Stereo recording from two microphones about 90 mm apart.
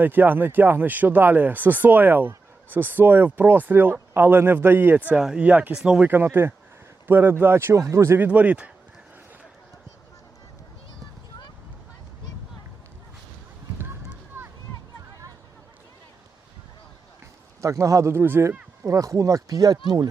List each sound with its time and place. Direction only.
0.0 s speech: 20° right (ahead or behind)
8.3 s speech: 15° right (ahead or behind)
14.3 s a sound: 25° right (ahead or behind)
17.6 s speech: 35° right (ahead or behind)